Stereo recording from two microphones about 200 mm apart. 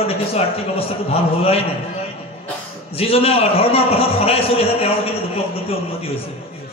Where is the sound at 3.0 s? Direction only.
30° left (ahead or behind).